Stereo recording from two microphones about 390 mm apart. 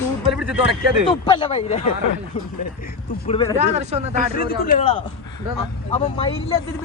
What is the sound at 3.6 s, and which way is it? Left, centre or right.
Speech, centre.